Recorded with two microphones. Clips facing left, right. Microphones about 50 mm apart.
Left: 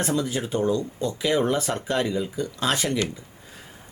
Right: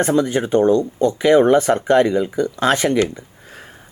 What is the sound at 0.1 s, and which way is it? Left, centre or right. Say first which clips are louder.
Speech: right 9 dB; right.